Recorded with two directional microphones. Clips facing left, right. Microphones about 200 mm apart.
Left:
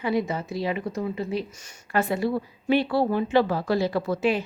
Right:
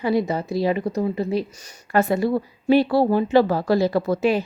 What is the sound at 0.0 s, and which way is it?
Speech, 35° right (ahead or behind).